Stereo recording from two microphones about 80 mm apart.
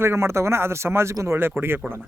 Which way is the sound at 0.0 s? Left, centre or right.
Right.